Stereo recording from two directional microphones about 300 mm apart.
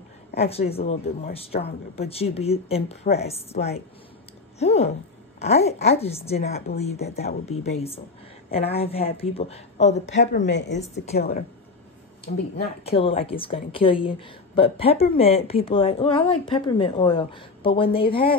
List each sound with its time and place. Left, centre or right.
0.4 s speech: centre
10.0 s a woman's voice: left
10.8 s speech: left
12.8 s a woman's voice: centre